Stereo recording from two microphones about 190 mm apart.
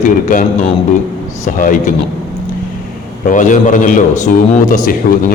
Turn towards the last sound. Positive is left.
turn(degrees=50)  # may be behind; listen again after turning